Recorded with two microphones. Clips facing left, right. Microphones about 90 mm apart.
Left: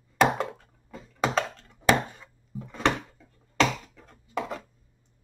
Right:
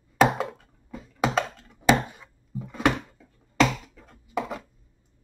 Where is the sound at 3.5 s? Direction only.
5° right (ahead or behind).